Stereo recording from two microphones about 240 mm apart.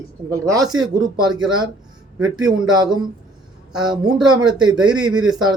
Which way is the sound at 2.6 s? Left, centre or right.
Centre.